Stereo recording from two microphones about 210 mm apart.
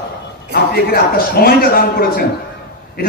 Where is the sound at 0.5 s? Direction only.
45° left (ahead or behind).